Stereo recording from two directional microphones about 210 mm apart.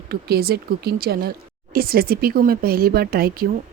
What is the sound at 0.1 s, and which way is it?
Speech, 50° right (ahead or behind).